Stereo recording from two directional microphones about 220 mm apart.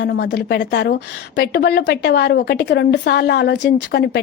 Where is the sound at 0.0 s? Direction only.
50° left (ahead or behind).